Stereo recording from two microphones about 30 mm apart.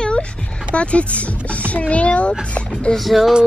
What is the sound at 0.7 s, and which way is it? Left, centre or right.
Speech, left.